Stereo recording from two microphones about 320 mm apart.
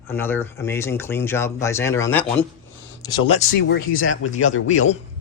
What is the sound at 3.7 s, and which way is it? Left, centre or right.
Speech, left.